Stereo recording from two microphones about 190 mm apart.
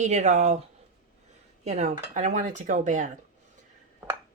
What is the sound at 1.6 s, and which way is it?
A woman's voice, 35° right (ahead or behind).